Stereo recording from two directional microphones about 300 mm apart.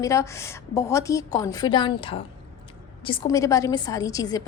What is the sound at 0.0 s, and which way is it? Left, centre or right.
A woman's voice, centre.